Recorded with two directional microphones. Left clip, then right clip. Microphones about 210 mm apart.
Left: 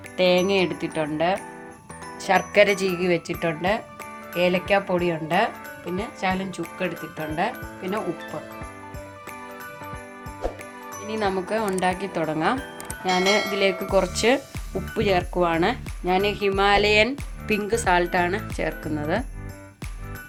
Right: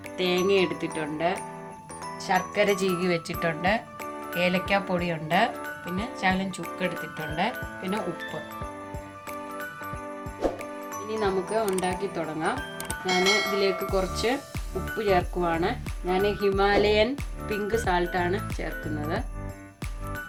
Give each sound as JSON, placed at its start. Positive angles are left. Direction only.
{"t": 0.2, "sound": "speech", "side_deg": 45}
{"t": 10.4, "sound": "music", "side_deg": 0}
{"t": 11.1, "sound": "speech", "side_deg": 45}
{"t": 12.9, "sound": "speech", "side_deg": 0}
{"t": 13.9, "sound": "speech", "side_deg": 45}